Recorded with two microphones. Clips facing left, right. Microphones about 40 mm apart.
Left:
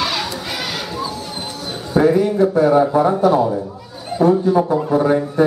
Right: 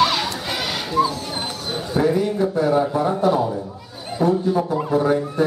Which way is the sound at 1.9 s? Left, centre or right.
Centre.